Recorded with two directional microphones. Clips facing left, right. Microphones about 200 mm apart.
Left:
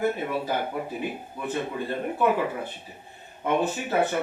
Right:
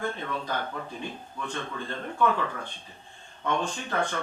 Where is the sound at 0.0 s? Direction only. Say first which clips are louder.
Left 6 dB; 10° left (ahead or behind).